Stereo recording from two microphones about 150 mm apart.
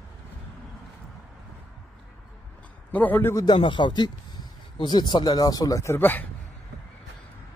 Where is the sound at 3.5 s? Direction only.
30° left (ahead or behind); by 6.3 s 15° left (ahead or behind).